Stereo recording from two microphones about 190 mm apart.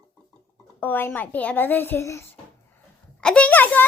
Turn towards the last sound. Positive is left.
turn(degrees=10)  # may be behind; listen again after turning